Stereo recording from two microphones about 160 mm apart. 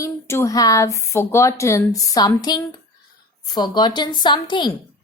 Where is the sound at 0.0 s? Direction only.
20° left (ahead or behind).